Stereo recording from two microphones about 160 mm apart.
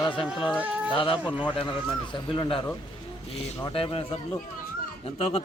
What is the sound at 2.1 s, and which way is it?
Speech, 30° left (ahead or behind).